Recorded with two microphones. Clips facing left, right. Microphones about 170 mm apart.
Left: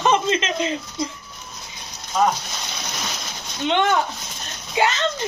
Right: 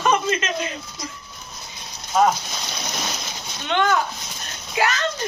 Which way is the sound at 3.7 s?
20° left (ahead or behind).